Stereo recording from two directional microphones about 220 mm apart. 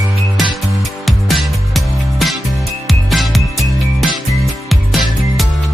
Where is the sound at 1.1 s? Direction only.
Centre (ahead or behind).